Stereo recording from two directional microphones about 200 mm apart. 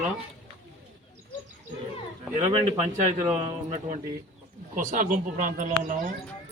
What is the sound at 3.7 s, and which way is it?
Speech, 35° right (ahead or behind).